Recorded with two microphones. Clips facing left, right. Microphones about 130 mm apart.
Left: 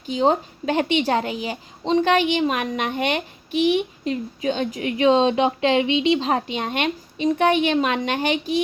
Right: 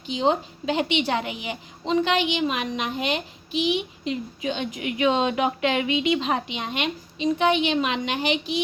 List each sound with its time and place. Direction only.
0.1 s a woman's voice: 45° left (ahead or behind)
2.0 s a woman's voice: 45° left (ahead or behind)